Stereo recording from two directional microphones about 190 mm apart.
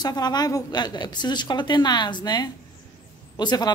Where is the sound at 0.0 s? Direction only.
20° left (ahead or behind).